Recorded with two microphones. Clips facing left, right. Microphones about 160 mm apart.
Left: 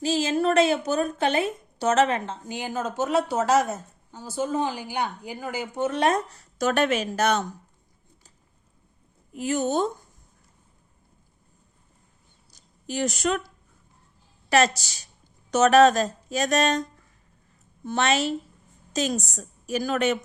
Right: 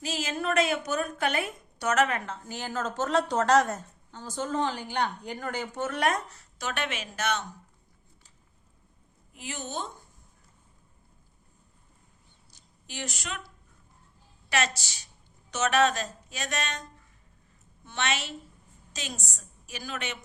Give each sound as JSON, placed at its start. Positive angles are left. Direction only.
{"t": 0.0, "sound": "a woman's voice", "side_deg": 30}
{"t": 6.6, "sound": "speech", "side_deg": 40}
{"t": 9.3, "sound": "a woman's voice", "side_deg": 45}
{"t": 12.5, "sound": "speech", "side_deg": 40}
{"t": 14.5, "sound": "speech", "side_deg": 40}
{"t": 17.8, "sound": "a woman's voice", "side_deg": 40}